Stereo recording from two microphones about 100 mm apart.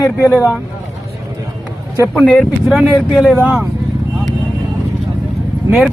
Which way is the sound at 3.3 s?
15° right (ahead or behind).